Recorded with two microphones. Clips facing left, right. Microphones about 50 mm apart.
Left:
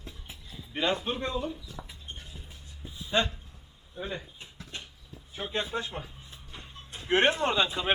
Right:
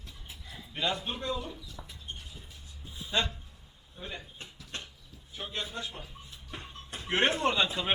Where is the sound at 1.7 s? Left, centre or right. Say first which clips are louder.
Left 3 dB; left.